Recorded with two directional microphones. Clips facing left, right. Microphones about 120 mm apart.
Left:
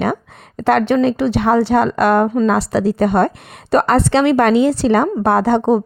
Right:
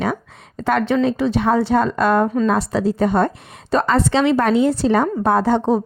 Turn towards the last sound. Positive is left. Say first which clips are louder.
# left 2 dB
turn(degrees=70)  # may be behind; listen again after turning